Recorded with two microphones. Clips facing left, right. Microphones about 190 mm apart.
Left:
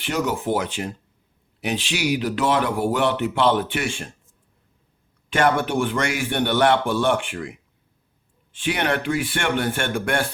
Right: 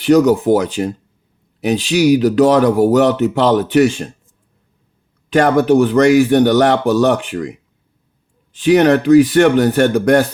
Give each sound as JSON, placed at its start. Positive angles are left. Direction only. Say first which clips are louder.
{"t": 0.0, "sound": "speech", "louder": "right 13 dB", "side_deg": -40}
{"t": 5.3, "sound": "speech", "louder": "right 9 dB", "side_deg": -40}
{"t": 8.5, "sound": "speech", "louder": "right 13 dB", "side_deg": -40}